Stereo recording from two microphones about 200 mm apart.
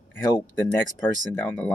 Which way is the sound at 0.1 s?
10° left (ahead or behind).